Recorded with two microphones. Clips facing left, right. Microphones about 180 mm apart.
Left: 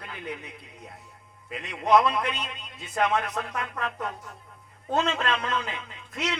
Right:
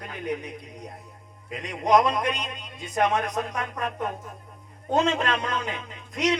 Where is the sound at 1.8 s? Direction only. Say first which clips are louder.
Right 1 dB; 15° right (ahead or behind).